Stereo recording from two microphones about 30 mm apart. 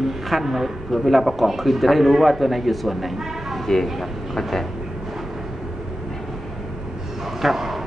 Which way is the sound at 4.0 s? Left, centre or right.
Centre.